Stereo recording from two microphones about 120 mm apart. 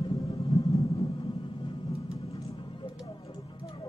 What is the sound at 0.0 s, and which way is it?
Music, 55° left (ahead or behind).